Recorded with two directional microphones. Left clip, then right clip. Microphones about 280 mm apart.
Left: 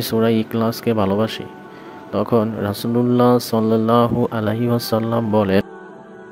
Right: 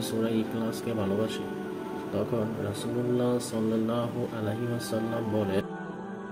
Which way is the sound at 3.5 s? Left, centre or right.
Left.